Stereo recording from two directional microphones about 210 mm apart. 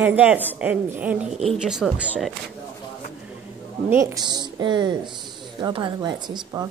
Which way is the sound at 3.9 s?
15° right (ahead or behind).